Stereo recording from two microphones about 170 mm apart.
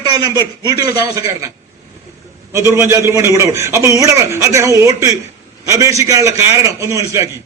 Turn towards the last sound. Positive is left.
turn(degrees=-15)  # may be behind; listen again after turning